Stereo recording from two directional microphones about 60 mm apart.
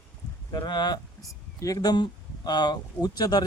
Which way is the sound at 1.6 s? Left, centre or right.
Left.